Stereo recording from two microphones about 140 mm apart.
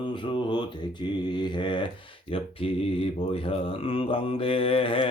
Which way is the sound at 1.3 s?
35° left (ahead or behind).